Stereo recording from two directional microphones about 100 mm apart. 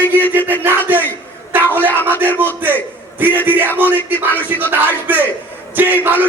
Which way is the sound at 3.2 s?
20° right (ahead or behind).